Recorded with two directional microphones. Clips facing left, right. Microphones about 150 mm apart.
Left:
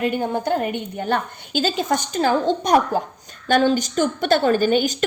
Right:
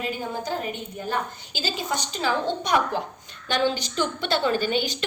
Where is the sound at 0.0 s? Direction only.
60° left (ahead or behind).